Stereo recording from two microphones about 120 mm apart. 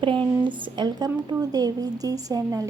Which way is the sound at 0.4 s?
40° right (ahead or behind).